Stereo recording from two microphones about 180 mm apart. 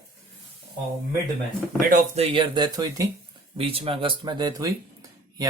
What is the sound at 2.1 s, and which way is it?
Speech, 30° right (ahead or behind).